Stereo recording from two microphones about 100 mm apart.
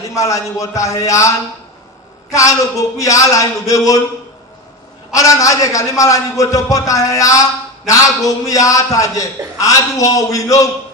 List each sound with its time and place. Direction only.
0.1 s a man's voice: 35° left (ahead or behind)
3.0 s a man's voice: 35° left (ahead or behind)
5.1 s a man's voice: 35° left (ahead or behind)